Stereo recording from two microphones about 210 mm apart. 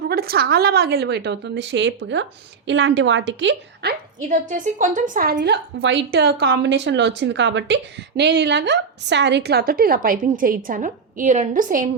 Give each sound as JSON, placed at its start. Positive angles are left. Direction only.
{"t": 0.1, "sound": "a woman's voice", "side_deg": -45}
{"t": 4.3, "sound": "a woman's voice", "side_deg": -35}